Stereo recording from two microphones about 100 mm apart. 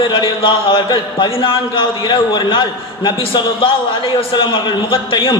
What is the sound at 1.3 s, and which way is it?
A man's voice, 65° left (ahead or behind).